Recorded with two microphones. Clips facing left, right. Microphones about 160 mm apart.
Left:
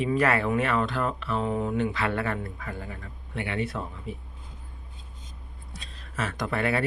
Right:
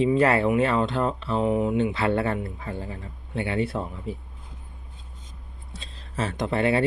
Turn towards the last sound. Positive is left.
turn(degrees=-25)  # may be behind; listen again after turning